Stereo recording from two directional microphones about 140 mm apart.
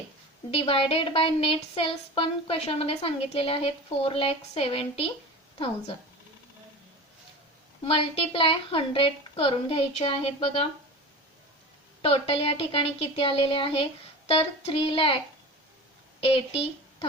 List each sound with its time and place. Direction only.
0.5 s speech: 45° left (ahead or behind)
7.9 s a woman's voice: 40° left (ahead or behind)
12.0 s a woman's voice: 45° left (ahead or behind)
16.2 s a woman's voice: 45° left (ahead or behind)